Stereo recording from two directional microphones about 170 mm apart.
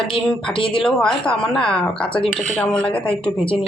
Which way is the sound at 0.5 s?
30° left (ahead or behind).